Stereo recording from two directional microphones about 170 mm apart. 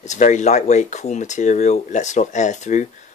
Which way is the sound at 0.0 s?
45° left (ahead or behind).